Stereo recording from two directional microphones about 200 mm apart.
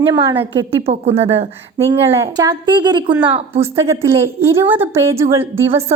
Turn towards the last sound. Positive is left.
turn(degrees=-10)  # may be behind; listen again after turning